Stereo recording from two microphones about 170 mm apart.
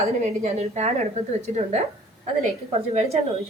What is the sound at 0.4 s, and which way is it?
A woman's voice, 40° right (ahead or behind).